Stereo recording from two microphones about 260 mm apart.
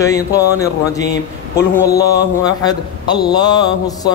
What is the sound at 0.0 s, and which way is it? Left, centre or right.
Speech, centre.